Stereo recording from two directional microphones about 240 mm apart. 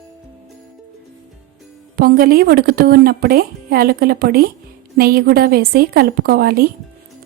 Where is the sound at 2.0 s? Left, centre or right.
Right.